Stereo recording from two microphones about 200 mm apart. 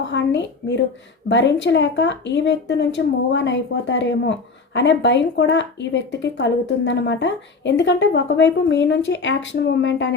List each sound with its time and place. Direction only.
0.0 s a woman's voice: 65° left (ahead or behind)